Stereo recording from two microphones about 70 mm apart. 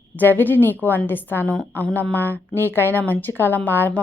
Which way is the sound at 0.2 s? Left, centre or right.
Left.